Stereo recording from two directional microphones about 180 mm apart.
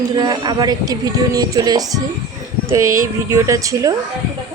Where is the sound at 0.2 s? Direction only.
20° right (ahead or behind).